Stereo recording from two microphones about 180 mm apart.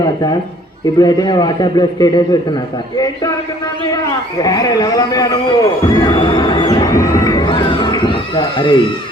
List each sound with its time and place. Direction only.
0.9 s a man's voice: 20° left (ahead or behind)
3.9 s a man's voice: 20° left (ahead or behind)